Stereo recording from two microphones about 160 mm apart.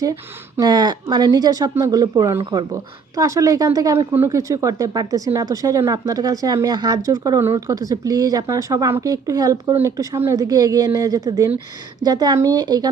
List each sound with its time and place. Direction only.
0.0 s speech: 20° right (ahead or behind)